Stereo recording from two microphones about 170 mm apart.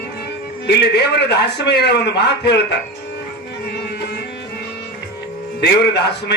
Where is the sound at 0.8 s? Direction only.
75° left (ahead or behind).